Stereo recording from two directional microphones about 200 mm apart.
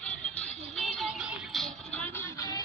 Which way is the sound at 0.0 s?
5° left (ahead or behind).